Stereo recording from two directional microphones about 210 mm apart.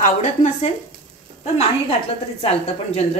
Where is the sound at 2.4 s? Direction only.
30° left (ahead or behind).